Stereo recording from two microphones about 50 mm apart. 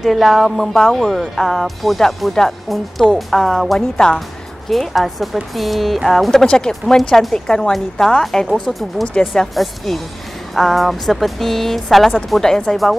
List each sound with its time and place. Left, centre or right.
0.0 s speech: centre
4.6 s speech: centre
6.4 s speech: centre